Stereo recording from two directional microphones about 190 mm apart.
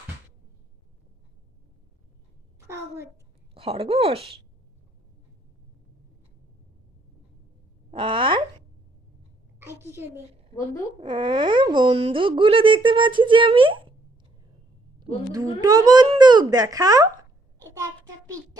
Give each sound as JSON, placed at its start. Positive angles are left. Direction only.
{"t": 2.6, "sound": "a sound", "side_deg": -15}
{"t": 3.5, "sound": "speech", "side_deg": -30}
{"t": 7.9, "sound": "speech", "side_deg": -25}
{"t": 9.6, "sound": "a woman's voice", "side_deg": -15}
{"t": 11.0, "sound": "speech", "side_deg": -25}
{"t": 15.6, "sound": "speech", "side_deg": -20}
{"t": 17.7, "sound": "a sound", "side_deg": -15}